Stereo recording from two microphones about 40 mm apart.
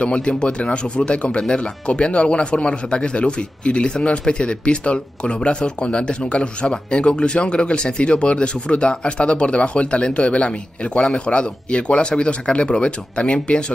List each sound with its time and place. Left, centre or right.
0.0 s speech: left